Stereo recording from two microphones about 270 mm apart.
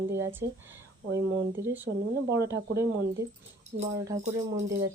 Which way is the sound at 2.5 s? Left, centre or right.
Right.